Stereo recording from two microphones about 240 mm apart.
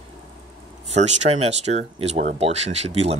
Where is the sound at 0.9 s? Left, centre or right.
Right.